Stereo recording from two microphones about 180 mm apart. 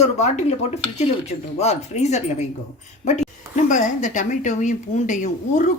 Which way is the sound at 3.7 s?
45° left (ahead or behind).